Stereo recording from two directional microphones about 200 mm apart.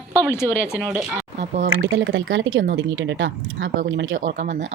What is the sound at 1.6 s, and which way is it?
Speech, 70° right (ahead or behind).